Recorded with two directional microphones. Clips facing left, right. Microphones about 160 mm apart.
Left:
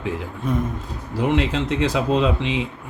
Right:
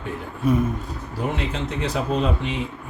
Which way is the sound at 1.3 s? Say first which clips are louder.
Left 8 dB; 90° left.